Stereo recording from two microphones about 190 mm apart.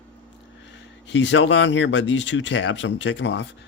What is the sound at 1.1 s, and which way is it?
Speech, 70° left (ahead or behind).